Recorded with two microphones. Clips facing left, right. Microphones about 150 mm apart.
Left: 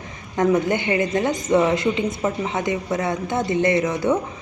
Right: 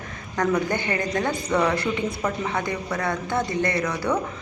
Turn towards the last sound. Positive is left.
turn(degrees=20)  # may be behind; listen again after turning